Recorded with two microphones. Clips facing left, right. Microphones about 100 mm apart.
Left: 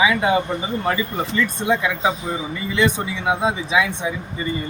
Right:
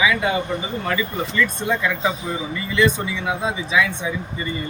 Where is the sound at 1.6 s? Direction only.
15° left (ahead or behind).